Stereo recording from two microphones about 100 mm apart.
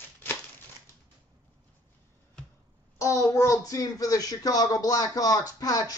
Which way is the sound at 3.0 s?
30° left (ahead or behind).